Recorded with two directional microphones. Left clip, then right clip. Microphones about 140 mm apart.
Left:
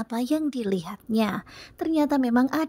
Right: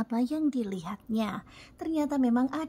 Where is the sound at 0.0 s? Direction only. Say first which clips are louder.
Left 3 dB; 40° left (ahead or behind).